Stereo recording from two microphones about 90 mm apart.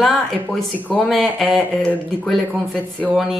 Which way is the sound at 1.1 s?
Centre (ahead or behind).